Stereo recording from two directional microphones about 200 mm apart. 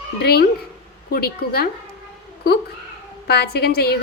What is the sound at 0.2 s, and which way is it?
A woman's voice, 50° left (ahead or behind).